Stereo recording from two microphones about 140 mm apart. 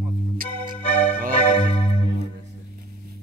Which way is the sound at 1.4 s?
45° left (ahead or behind).